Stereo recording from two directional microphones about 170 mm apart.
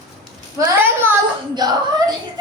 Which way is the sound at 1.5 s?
25° right (ahead or behind).